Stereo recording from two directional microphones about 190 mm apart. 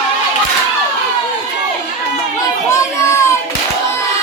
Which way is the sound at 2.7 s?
15° left (ahead or behind).